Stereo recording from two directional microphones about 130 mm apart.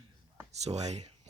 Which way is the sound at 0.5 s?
55° right (ahead or behind).